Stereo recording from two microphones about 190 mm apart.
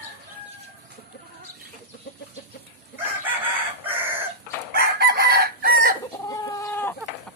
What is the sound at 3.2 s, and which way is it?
Chicken, 10° right (ahead or behind).